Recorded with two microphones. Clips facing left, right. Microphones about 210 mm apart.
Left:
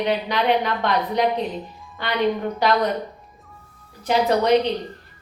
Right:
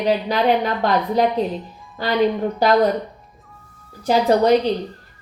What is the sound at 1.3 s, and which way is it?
Speech, centre (ahead or behind).